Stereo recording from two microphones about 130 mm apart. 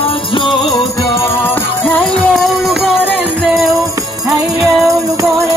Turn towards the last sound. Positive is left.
turn(degrees=0)  # may be behind; listen again after turning